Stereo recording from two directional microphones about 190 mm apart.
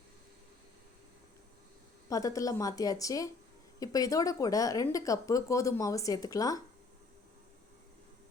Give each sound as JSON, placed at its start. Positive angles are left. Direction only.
{"t": 2.0, "sound": "speech", "side_deg": 15}